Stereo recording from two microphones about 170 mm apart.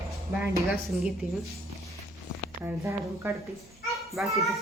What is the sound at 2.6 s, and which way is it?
Speech, 15° right (ahead or behind).